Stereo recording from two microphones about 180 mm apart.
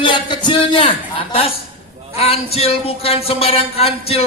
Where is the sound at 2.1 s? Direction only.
35° left (ahead or behind).